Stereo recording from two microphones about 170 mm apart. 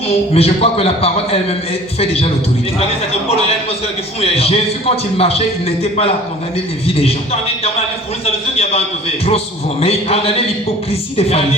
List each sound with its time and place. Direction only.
0.3 s a man's voice: 35° left (ahead or behind)
8.2 s a man's voice: 35° left (ahead or behind)
9.8 s a man's voice: 35° left (ahead or behind)